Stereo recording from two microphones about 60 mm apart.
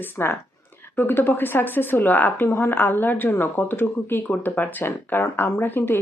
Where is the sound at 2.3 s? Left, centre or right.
Left.